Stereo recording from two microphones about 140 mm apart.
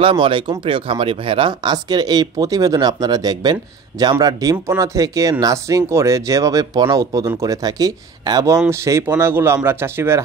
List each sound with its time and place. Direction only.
0.0 s speech: 40° right (ahead or behind); by 10.2 s 15° right (ahead or behind)